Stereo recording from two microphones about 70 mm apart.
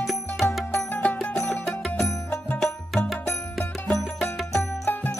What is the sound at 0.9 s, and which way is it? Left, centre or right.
Music, left.